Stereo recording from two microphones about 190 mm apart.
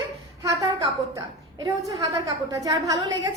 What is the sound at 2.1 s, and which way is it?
Speech, 15° right (ahead or behind).